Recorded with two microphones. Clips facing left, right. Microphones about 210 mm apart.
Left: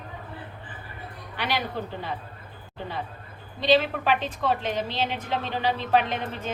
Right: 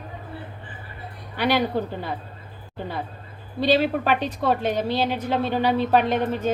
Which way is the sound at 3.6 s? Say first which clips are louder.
Right 2 dB; 45° right (ahead or behind).